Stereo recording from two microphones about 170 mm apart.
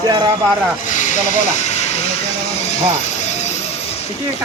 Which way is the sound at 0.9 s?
50° left (ahead or behind).